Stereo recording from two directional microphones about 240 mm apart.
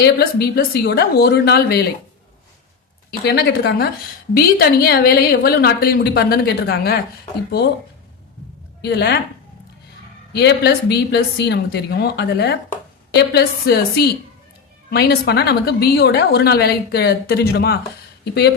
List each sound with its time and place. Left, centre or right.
0.0 s a woman's voice: left
3.1 s a woman's voice: left
8.8 s speech: left
10.3 s a woman's voice: left